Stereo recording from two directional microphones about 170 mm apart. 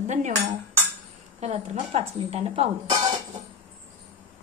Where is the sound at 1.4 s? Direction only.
40° right (ahead or behind).